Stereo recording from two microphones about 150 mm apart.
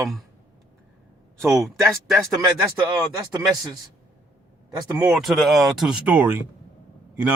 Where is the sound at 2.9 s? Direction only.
25° right (ahead or behind).